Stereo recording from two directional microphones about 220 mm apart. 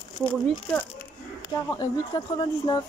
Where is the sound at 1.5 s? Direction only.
15° left (ahead or behind).